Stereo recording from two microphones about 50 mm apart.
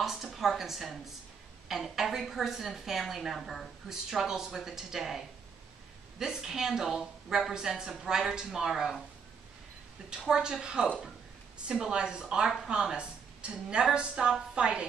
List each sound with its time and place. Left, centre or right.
0.0 s a sound: centre
1.7 s a woman's voice: centre
10.0 s a woman's voice: centre